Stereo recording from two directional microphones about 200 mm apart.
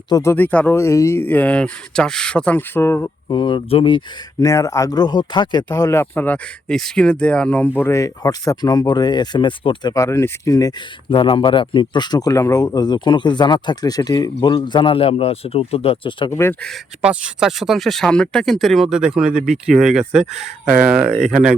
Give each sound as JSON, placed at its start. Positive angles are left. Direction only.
{"t": 0.1, "sound": "speech", "side_deg": 15}
{"t": 16.3, "sound": "speech", "side_deg": 10}